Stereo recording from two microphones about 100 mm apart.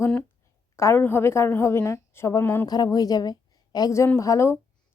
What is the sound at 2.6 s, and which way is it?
A woman's voice, 40° left (ahead or behind).